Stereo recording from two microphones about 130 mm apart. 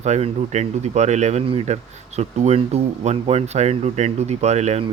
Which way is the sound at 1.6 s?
60° right (ahead or behind).